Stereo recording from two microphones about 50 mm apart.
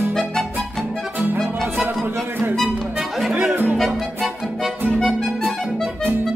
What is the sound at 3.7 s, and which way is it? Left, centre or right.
Music, centre.